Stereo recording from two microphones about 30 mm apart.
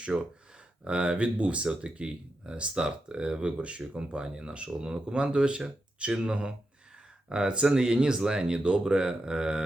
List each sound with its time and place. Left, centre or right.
0.1 s speech: right
7.6 s speech: centre